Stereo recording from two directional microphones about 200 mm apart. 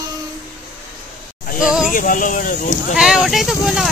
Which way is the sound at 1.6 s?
5° right (ahead or behind).